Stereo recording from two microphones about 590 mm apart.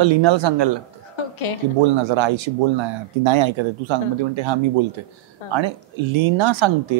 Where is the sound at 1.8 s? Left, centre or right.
Right.